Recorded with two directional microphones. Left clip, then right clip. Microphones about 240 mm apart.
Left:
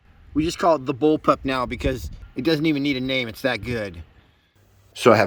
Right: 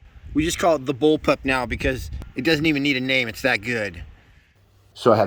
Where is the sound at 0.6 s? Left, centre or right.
Centre.